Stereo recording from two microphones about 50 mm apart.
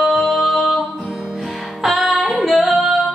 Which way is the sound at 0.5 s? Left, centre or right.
Left.